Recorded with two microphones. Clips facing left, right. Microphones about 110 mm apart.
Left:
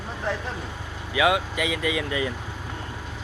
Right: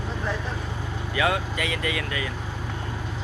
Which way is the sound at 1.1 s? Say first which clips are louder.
Left 3 dB; 10° left (ahead or behind).